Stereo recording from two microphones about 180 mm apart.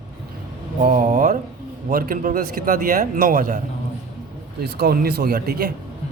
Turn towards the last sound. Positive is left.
turn(degrees=-55)  # may be behind; listen again after turning